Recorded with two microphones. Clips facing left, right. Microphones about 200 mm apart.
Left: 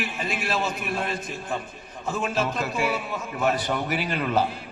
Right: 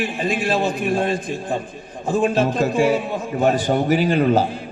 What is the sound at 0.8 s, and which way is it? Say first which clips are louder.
Speech: right 9 dB; 30° right (ahead or behind).